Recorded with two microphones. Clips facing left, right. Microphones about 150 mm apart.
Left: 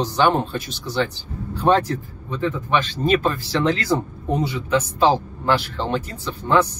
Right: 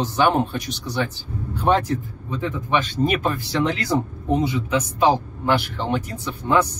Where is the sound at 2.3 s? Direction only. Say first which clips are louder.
Left 2 dB; 20° right (ahead or behind).